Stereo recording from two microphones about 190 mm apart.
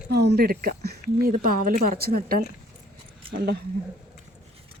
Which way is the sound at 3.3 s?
60° right (ahead or behind).